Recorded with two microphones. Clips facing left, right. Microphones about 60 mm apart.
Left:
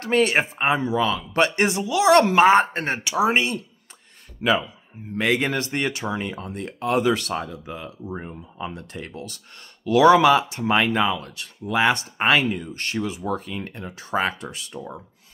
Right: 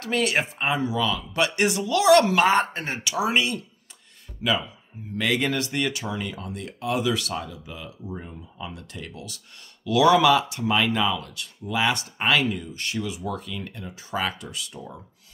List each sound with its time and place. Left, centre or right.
0.0 s speech: left
4.4 s speech: left
5.1 s speech: left
12.7 s speech: left
14.1 s speech: left